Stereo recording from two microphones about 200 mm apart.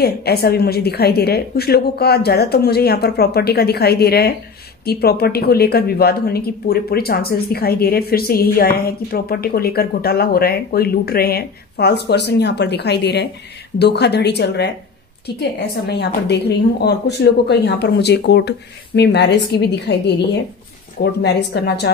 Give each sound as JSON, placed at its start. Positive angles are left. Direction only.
{"t": 0.0, "sound": "a woman's voice", "side_deg": 50}
{"t": 21.0, "sound": "a woman's voice", "side_deg": 55}